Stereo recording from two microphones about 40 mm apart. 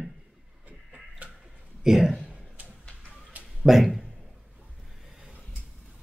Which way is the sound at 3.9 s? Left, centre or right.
Centre.